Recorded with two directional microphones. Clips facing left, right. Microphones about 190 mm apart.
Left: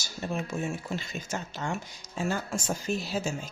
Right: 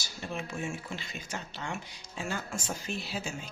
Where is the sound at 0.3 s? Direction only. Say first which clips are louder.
Left 4 dB; 40° left (ahead or behind).